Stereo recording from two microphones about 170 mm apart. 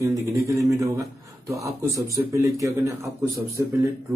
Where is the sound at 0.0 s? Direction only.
15° right (ahead or behind).